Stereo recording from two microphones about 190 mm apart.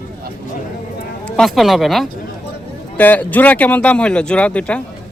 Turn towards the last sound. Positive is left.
turn(degrees=5)  # may be behind; listen again after turning